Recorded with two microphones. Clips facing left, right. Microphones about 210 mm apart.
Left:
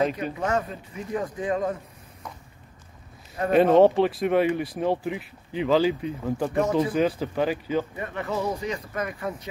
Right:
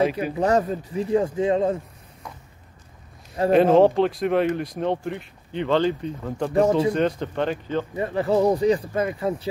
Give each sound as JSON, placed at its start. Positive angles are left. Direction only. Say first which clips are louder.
{"t": 0.4, "sound": "speech", "louder": "right 8 dB", "side_deg": -35}
{"t": 3.5, "sound": "speech", "louder": "right 1 dB", "side_deg": 0}
{"t": 6.5, "sound": "speech", "louder": "right 5 dB", "side_deg": -30}
{"t": 6.9, "sound": "speech", "louder": "right 1 dB", "side_deg": 5}
{"t": 7.9, "sound": "speech", "louder": "right 8 dB", "side_deg": -30}